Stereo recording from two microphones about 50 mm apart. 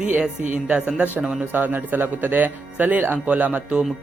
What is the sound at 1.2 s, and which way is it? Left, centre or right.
Speech, centre.